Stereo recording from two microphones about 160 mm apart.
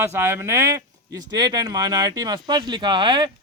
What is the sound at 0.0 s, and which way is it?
Speech, 15° right (ahead or behind).